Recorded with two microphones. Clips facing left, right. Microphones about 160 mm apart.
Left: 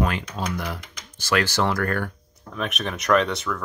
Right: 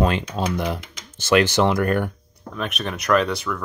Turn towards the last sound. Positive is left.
turn(degrees=0)  # may be behind; listen again after turning